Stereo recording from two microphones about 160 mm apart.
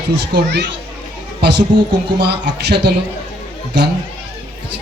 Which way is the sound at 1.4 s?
90° right.